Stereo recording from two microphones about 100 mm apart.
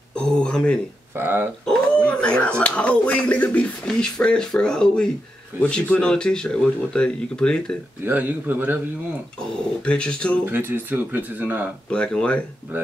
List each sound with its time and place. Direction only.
0.1 s a sound: 10° left (ahead or behind)
1.1 s speech: 20° right (ahead or behind)
2.0 s speech: 10° left (ahead or behind)
8.0 s speech: 15° right (ahead or behind)
9.8 s speech: 10° left (ahead or behind)
10.4 s speech: 20° right (ahead or behind)
11.9 s speech: 10° left (ahead or behind)
12.7 s speech: 20° right (ahead or behind)